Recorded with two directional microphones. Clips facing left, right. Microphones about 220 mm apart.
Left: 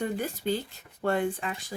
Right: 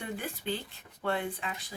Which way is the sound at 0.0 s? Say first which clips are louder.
Left 7 dB; 40° left (ahead or behind).